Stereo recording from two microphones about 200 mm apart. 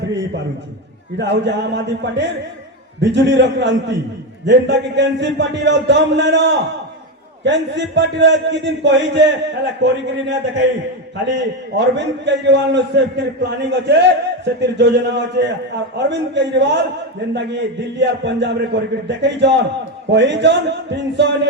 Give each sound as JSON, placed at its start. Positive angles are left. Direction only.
{"t": 1.2, "sound": "a man's voice", "side_deg": -60}